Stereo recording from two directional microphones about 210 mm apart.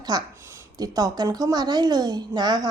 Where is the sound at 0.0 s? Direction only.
15° right (ahead or behind).